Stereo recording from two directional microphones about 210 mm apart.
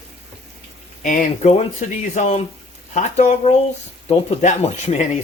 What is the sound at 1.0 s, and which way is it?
Speech, 35° left (ahead or behind).